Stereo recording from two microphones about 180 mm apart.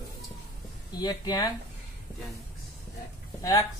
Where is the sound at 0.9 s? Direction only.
20° left (ahead or behind).